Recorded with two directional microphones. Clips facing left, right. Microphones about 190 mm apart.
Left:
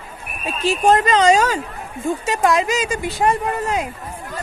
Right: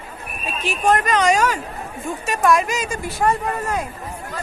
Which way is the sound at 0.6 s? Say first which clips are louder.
Left 4 dB; 30° left (ahead or behind).